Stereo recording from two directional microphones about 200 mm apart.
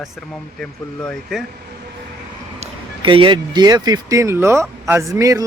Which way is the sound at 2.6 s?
25° right (ahead or behind).